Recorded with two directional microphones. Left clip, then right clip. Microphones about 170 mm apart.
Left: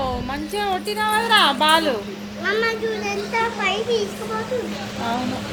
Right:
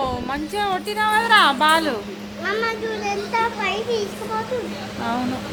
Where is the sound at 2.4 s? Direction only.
10° left (ahead or behind).